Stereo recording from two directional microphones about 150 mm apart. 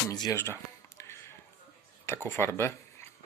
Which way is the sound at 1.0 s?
20° left (ahead or behind).